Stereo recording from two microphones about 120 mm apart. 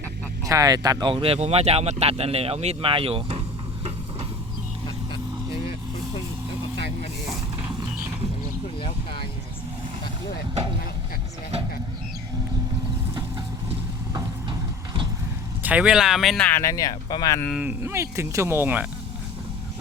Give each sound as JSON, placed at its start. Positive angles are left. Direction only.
{"t": 0.4, "sound": "speech", "side_deg": -30}
{"t": 1.1, "sound": "speech", "side_deg": -50}
{"t": 15.6, "sound": "speech", "side_deg": -10}
{"t": 16.5, "sound": "speech", "side_deg": 25}
{"t": 17.5, "sound": "speech", "side_deg": -15}